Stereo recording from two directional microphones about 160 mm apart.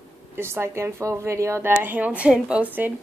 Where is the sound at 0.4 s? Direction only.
15° right (ahead or behind).